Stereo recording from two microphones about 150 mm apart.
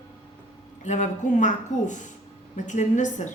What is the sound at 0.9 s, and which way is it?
A woman's voice, 55° left (ahead or behind).